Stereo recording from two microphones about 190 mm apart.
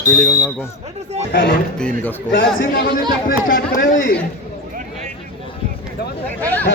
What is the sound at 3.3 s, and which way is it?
Speech, 50° left (ahead or behind).